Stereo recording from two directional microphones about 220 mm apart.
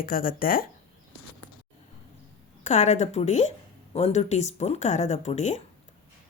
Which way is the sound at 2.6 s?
30° left (ahead or behind).